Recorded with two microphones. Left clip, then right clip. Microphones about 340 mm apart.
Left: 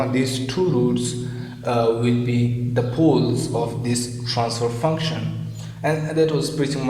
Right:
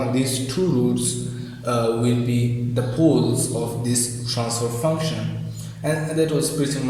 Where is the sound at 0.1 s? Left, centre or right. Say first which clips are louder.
Left 1 dB; left.